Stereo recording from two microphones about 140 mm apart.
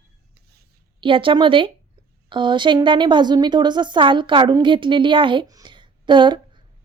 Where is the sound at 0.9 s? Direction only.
40° right (ahead or behind).